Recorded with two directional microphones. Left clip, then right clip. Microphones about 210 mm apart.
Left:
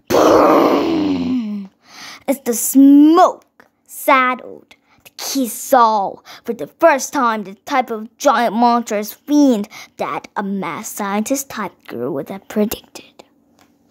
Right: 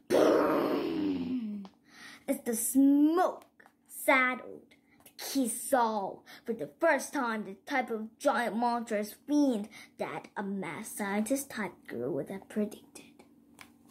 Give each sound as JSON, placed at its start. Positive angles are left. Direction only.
{"t": 0.1, "sound": "groan", "side_deg": 50}